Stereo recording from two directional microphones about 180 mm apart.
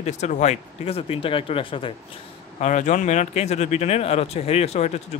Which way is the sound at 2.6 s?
40° left (ahead or behind).